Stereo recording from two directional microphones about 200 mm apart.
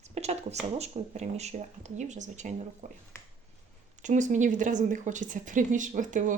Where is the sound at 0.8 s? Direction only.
35° right (ahead or behind).